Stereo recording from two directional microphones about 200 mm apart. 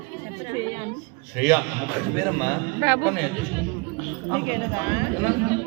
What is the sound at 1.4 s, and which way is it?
A man's voice, 10° right (ahead or behind).